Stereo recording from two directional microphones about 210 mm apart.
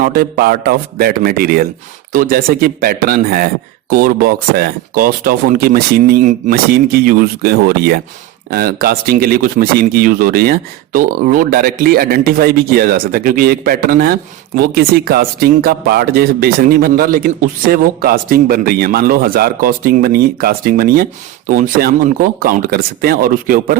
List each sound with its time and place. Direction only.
0.0 s speech: 45° right (ahead or behind)